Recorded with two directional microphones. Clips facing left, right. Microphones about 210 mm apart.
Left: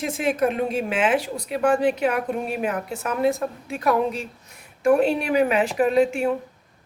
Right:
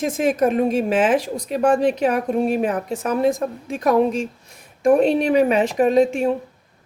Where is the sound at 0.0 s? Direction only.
45° right (ahead or behind).